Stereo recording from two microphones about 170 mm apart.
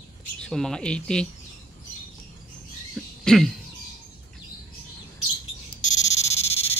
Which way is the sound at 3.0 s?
5° left (ahead or behind).